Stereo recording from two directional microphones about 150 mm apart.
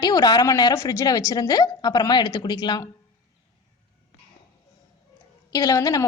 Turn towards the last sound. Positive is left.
turn(degrees=25)  # may be behind; listen again after turning